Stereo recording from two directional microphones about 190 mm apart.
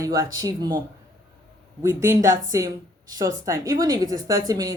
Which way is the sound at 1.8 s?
15° right (ahead or behind).